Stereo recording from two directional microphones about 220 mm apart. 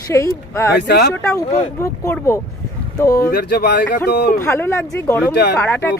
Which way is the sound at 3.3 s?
45° left (ahead or behind).